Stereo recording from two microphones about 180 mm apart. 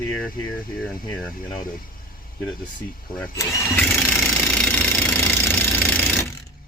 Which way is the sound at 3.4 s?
15° left (ahead or behind).